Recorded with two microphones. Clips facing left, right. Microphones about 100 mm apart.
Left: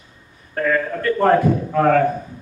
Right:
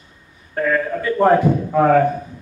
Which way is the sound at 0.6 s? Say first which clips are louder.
Right 1 dB; 5° right (ahead or behind).